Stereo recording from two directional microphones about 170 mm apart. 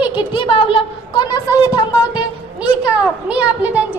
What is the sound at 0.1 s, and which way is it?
A woman's voice, 30° left (ahead or behind).